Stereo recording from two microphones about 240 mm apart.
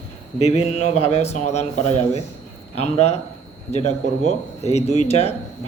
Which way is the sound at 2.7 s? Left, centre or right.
Left.